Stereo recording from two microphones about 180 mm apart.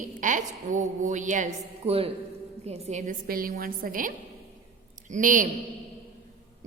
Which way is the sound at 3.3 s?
55° right (ahead or behind).